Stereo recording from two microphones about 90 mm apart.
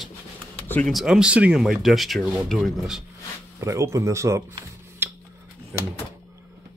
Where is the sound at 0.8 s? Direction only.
Centre (ahead or behind).